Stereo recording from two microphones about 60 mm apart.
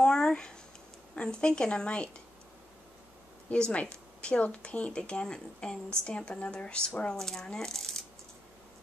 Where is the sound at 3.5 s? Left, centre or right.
Centre.